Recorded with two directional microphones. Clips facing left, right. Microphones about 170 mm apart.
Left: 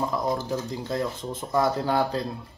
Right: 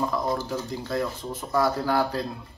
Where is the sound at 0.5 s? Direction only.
20° left (ahead or behind).